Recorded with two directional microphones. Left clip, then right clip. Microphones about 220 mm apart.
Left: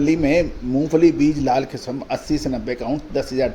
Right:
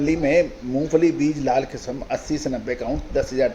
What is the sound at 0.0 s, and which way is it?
Speech, 35° left (ahead or behind).